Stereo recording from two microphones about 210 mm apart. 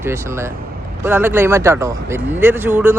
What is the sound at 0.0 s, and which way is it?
A man's voice, 15° right (ahead or behind).